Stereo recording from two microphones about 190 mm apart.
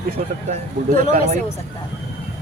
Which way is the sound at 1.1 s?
40° right (ahead or behind).